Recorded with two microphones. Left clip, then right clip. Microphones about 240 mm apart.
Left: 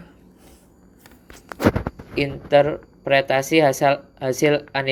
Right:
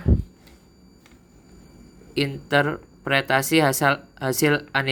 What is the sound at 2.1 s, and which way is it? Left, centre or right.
Speech, centre.